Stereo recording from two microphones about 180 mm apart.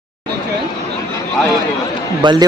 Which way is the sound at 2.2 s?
20° right (ahead or behind).